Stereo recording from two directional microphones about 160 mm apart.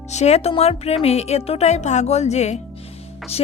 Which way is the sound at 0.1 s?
45° left (ahead or behind).